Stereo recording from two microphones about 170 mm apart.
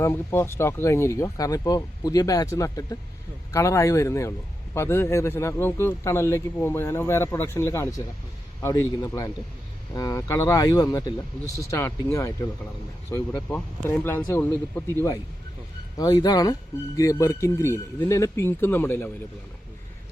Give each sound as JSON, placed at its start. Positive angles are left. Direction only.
{"t": 0.0, "sound": "speech", "side_deg": 15}
{"t": 16.0, "sound": "speech", "side_deg": 25}